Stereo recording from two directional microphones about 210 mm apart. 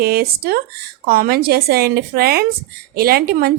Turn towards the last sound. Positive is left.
turn(degrees=-45)  # may be behind; listen again after turning